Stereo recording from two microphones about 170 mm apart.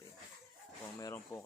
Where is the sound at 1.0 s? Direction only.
15° left (ahead or behind).